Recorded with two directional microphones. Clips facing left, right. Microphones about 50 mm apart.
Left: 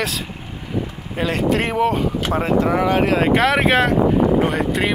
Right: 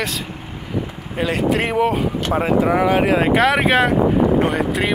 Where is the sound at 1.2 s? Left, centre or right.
Centre.